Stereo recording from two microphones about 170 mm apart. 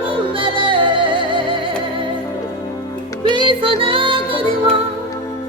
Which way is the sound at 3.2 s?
25° right (ahead or behind).